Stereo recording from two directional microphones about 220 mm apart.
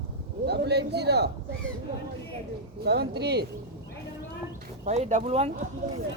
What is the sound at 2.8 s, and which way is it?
Speech, 50° right (ahead or behind).